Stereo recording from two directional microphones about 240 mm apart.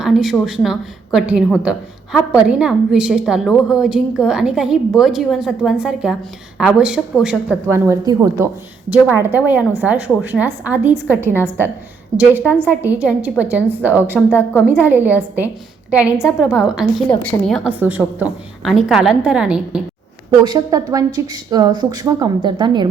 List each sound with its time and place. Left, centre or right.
0.0 s a woman's voice: centre
14.3 s a woman's voice: centre
14.8 s a woman's voice: centre
20.4 s speech: centre